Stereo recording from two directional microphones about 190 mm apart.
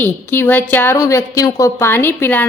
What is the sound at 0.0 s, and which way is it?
A woman's voice, 10° left (ahead or behind).